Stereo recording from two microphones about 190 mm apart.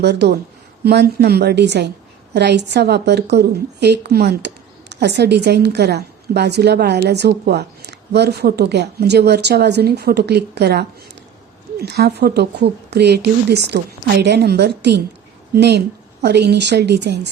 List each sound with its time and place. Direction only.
0.0 s a woman's voice: 60° right (ahead or behind)